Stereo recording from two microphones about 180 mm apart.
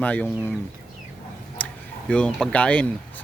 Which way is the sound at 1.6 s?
10° left (ahead or behind).